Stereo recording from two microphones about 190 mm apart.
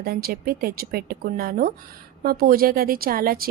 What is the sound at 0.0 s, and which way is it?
A woman's voice, 55° right (ahead or behind).